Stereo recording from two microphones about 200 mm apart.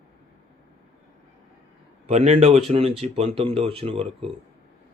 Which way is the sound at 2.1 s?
35° right (ahead or behind).